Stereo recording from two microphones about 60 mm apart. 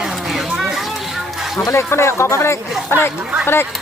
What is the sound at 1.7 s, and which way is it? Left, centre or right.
Speech, left.